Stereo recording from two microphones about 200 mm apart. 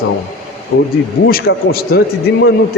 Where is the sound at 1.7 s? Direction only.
50° left (ahead or behind).